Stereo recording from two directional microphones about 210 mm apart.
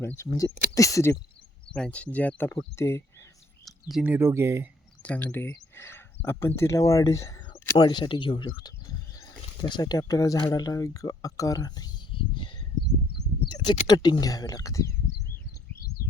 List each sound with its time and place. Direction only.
0.0 s speech: 10° left (ahead or behind)
1.7 s speech: 5° left (ahead or behind)
3.7 s speech: centre (ahead or behind)
5.0 s speech: 5° left (ahead or behind)
13.6 s speech: 20° left (ahead or behind)